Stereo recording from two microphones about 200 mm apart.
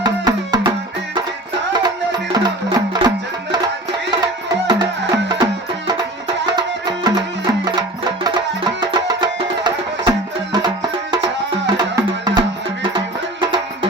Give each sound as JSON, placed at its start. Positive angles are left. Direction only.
{"t": 0.0, "sound": "music", "side_deg": -20}
{"t": 1.7, "sound": "music", "side_deg": -20}
{"t": 4.6, "sound": "music", "side_deg": -20}